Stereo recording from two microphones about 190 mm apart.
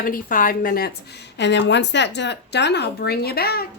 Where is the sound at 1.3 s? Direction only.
65° left (ahead or behind).